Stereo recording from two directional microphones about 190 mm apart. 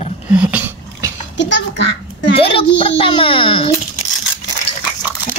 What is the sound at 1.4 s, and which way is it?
Speech, 70° left (ahead or behind).